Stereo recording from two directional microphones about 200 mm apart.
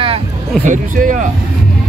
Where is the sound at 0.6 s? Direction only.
40° right (ahead or behind).